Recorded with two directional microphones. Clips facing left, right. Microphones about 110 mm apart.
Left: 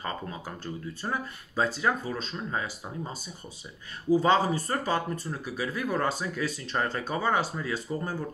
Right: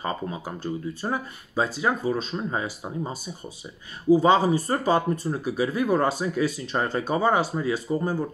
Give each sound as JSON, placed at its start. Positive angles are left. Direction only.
{"t": 0.0, "sound": "speech", "side_deg": -15}